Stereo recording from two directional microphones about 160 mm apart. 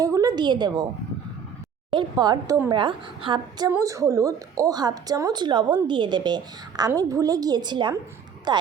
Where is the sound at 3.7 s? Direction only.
20° right (ahead or behind).